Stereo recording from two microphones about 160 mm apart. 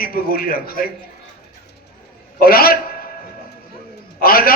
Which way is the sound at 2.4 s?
70° left (ahead or behind).